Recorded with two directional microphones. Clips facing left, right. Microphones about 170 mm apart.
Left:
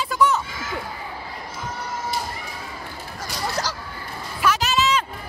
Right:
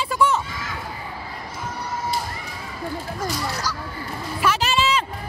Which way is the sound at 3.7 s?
75° left (ahead or behind).